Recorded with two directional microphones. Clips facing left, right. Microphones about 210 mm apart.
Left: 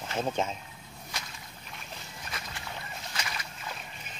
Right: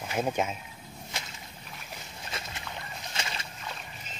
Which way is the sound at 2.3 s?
25° right (ahead or behind).